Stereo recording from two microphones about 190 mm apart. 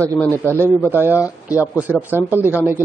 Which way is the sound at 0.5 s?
10° right (ahead or behind).